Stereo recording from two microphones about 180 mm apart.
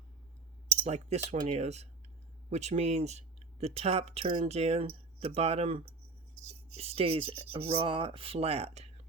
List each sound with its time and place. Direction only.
0.9 s speech: 35° right (ahead or behind)